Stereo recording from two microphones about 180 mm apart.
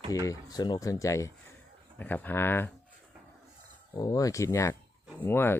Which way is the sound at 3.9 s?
20° left (ahead or behind).